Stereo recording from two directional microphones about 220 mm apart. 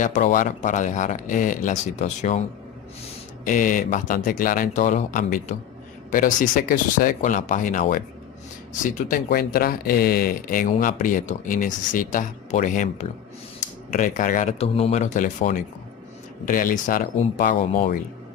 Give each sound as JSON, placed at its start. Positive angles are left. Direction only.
{"t": 0.0, "sound": "speech", "side_deg": 35}
{"t": 3.4, "sound": "speech", "side_deg": 35}